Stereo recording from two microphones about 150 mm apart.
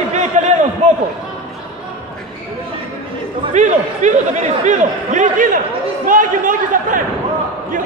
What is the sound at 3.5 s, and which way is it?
A man's voice, 55° right (ahead or behind).